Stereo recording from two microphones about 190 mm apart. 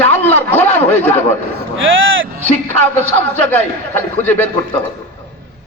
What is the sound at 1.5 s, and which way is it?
Speech, 85° right.